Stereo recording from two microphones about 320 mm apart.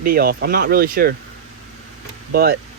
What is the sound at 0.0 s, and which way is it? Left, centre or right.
Speech, right.